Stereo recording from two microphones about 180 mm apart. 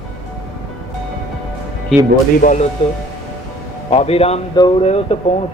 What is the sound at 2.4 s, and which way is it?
Speech, 45° left (ahead or behind).